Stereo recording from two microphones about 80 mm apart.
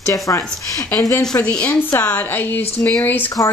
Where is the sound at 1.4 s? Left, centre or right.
Centre.